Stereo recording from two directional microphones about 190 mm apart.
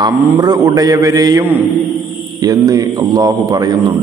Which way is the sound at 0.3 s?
20° right (ahead or behind).